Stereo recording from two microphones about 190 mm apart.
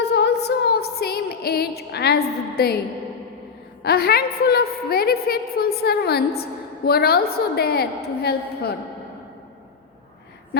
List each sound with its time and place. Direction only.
0.0 s music: 65° left (ahead or behind)
3.8 s a woman's voice: 55° left (ahead or behind)